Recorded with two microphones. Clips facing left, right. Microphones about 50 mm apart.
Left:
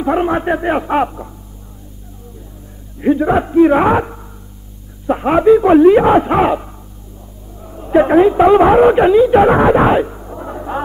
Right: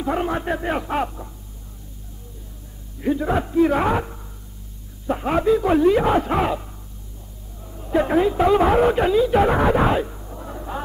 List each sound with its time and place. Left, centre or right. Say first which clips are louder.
0.0 s speech: left 8 dB; left
3.0 s a man's voice: left 8 dB; left